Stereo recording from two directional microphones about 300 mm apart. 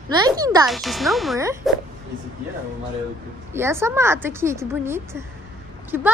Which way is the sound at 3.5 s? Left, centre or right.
Centre.